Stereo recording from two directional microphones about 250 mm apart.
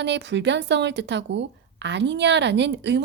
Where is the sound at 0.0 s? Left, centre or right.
Right.